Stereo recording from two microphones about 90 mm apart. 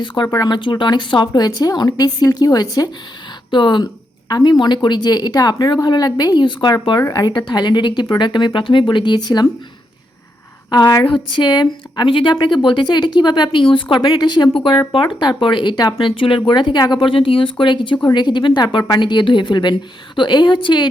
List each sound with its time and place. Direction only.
0.4 s a woman's voice: 60° left (ahead or behind)
3.5 s speech: 60° left (ahead or behind)
4.3 s a woman's voice: 50° left (ahead or behind)
10.7 s a woman's voice: 50° left (ahead or behind)
11.0 s speech: 65° left (ahead or behind)
14.5 s speech: 75° left (ahead or behind)
14.9 s speech: 65° left (ahead or behind)
16.0 s speech: 80° left; by 20.8 s 60° left (ahead or behind)